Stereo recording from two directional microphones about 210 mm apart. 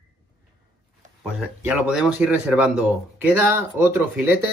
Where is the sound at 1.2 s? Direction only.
5° right (ahead or behind).